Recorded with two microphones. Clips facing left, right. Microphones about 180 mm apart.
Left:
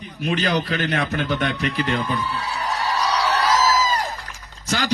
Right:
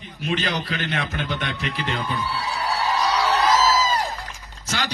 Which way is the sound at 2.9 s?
10° right (ahead or behind).